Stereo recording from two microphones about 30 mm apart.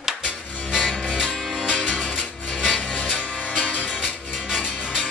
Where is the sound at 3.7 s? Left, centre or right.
Left.